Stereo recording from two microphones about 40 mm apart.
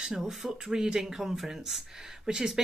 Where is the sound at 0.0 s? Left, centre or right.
Centre.